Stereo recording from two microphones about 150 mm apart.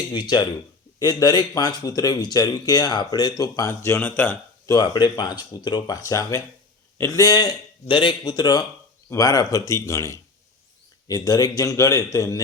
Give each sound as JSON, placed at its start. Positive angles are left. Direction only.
{"t": 0.1, "sound": "speech", "side_deg": 30}
{"t": 4.6, "sound": "speech", "side_deg": 25}